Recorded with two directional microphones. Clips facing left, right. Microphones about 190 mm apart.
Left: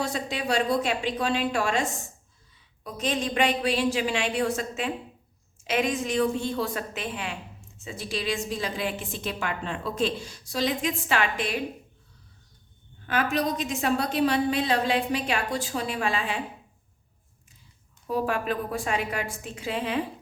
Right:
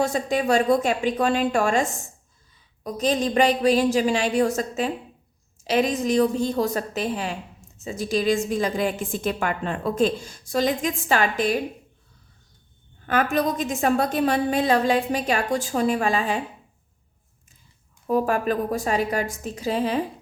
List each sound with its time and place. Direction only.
0.0 s a woman's voice: 50° right (ahead or behind)
13.1 s a woman's voice: 50° right (ahead or behind)
18.1 s a woman's voice: 45° right (ahead or behind)